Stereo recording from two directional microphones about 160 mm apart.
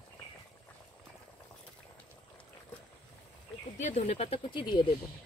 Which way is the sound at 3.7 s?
50° left (ahead or behind).